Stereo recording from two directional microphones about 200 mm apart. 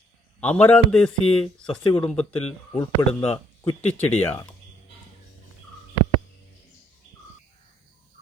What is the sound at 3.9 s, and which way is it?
Speech, 10° left (ahead or behind).